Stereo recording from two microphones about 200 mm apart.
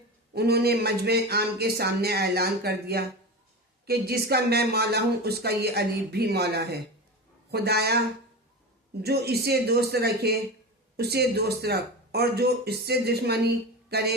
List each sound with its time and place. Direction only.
0.3 s speech: 55° right (ahead or behind)
9.0 s speech: 50° right (ahead or behind)